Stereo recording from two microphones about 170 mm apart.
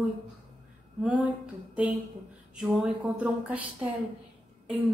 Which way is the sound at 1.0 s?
10° right (ahead or behind).